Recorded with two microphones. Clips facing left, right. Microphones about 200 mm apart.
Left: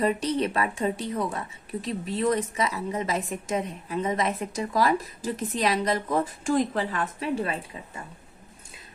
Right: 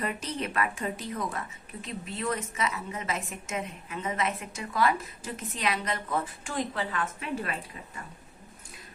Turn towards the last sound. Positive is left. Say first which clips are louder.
# left 5 dB
turn(degrees=30)  # may be behind; listen again after turning